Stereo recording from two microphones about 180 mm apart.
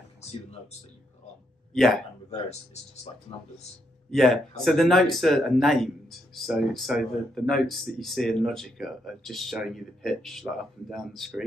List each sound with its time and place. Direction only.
1.7 s speech: centre (ahead or behind)
2.7 s speech: 40° left (ahead or behind)
4.1 s speech: centre (ahead or behind)